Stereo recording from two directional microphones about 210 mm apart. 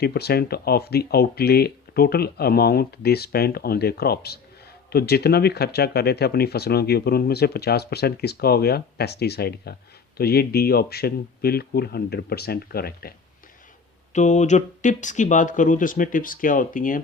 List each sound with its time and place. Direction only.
0.0 s speech: 50° left (ahead or behind)
14.1 s speech: 35° left (ahead or behind)